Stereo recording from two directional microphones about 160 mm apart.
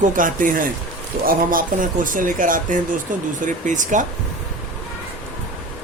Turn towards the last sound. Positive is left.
turn(degrees=-50)  # may be behind; listen again after turning